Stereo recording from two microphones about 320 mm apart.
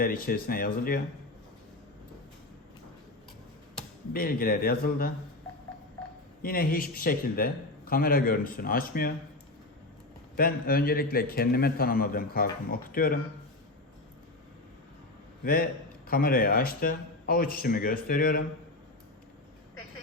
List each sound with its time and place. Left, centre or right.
0.0 s a man's voice: left
4.1 s a man's voice: left
6.4 s a man's voice: left
10.3 s a man's voice: left
16.0 s a man's voice: left